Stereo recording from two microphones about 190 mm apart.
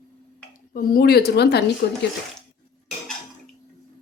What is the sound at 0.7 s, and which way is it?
Speech, 50° left (ahead or behind).